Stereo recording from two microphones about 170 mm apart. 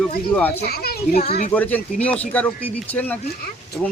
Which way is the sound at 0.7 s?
65° left (ahead or behind).